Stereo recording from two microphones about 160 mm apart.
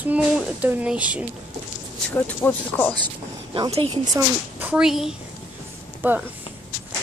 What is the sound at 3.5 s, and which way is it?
Speech, 30° right (ahead or behind).